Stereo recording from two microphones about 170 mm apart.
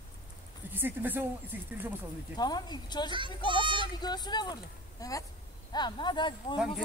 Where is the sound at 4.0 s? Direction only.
25° left (ahead or behind).